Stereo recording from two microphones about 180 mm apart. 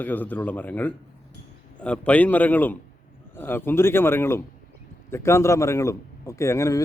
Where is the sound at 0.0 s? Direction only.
10° left (ahead or behind).